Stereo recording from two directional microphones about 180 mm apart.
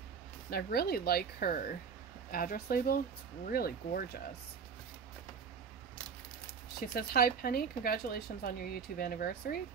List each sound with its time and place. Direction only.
0.5 s a woman's voice: 60° left (ahead or behind)
6.9 s a woman's voice: 60° left (ahead or behind)